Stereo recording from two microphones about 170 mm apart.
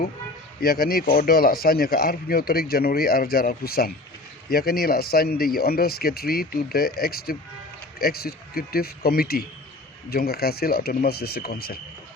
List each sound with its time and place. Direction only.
0.6 s speech: 65° left (ahead or behind)